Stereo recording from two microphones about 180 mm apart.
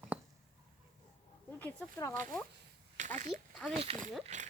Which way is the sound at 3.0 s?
40° right (ahead or behind).